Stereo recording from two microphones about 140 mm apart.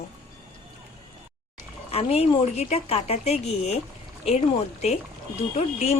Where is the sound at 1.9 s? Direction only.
45° left (ahead or behind).